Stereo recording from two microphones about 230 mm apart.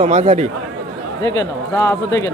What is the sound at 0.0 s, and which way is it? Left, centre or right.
Speech, right.